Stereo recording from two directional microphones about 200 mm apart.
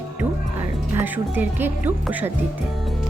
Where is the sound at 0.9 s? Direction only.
10° right (ahead or behind).